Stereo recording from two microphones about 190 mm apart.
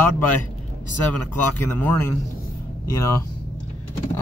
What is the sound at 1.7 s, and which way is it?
Speech, 10° left (ahead or behind).